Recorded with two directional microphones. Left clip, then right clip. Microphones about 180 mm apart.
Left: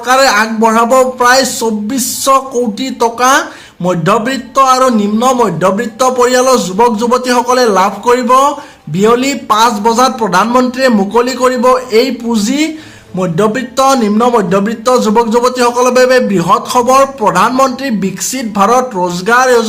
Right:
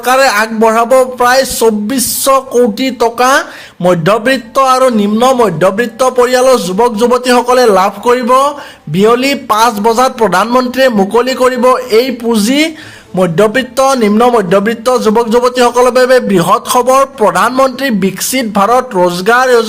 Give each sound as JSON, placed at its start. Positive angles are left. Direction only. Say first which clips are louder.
{"t": 0.0, "sound": "a man's voice", "louder": "even", "side_deg": -30}